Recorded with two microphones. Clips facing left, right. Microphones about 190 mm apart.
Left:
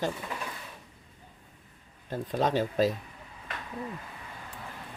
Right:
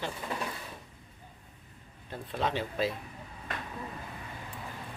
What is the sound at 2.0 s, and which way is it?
Speech, 40° left (ahead or behind).